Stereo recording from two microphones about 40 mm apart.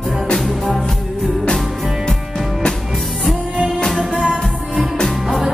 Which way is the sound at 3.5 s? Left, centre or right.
Centre.